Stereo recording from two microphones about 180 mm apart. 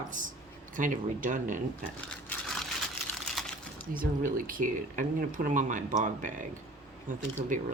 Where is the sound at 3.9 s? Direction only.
50° right (ahead or behind).